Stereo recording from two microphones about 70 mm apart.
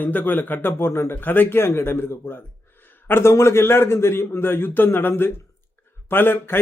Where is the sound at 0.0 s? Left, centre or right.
Left.